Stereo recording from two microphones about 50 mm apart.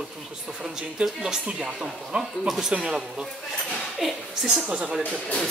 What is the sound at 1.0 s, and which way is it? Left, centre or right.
Speech, centre.